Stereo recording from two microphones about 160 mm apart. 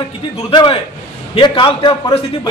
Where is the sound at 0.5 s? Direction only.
30° left (ahead or behind).